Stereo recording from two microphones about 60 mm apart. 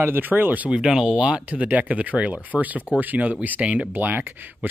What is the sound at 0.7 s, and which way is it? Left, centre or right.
Speech, centre.